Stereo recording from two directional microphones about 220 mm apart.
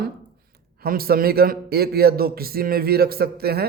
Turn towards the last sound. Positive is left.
turn(degrees=-45)  # may be behind; listen again after turning